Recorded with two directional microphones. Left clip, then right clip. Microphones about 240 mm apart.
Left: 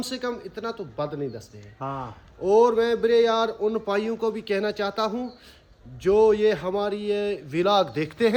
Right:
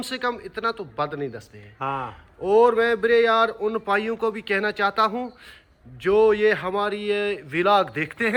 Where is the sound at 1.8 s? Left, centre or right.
Right.